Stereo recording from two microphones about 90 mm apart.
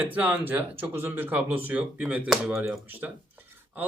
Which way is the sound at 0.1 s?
15° right (ahead or behind).